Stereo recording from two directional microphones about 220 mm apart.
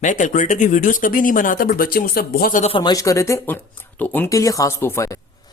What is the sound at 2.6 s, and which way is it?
Speech, 20° left (ahead or behind).